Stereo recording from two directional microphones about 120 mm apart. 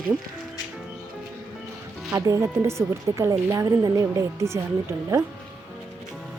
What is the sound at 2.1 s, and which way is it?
Speech, 25° right (ahead or behind).